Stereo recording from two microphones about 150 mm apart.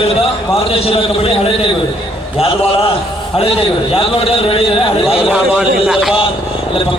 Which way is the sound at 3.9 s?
40° left (ahead or behind).